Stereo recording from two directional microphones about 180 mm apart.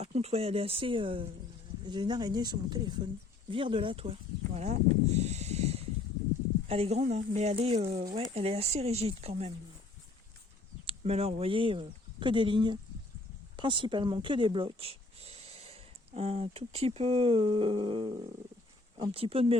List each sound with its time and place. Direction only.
0.0 s a woman's voice: 35° right (ahead or behind)
10.8 s speech: 35° right (ahead or behind)